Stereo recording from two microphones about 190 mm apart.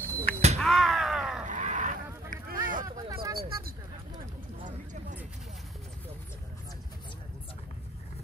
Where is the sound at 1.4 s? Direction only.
40° right (ahead or behind).